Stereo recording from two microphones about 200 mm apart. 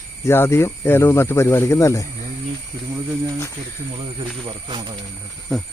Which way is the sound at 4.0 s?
25° right (ahead or behind).